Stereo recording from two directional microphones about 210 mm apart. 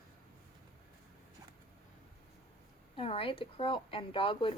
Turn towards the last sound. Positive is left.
turn(degrees=25)  # may be behind; listen again after turning